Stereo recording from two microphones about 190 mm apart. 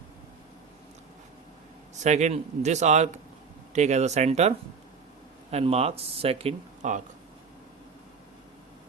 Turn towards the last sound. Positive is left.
turn(degrees=-40)  # may be behind; listen again after turning